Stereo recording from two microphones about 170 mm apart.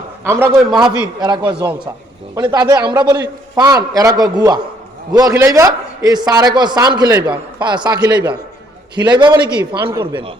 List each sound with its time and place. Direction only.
0.3 s a man's voice: 15° right (ahead or behind)
1.0 s a man's voice: 25° right (ahead or behind)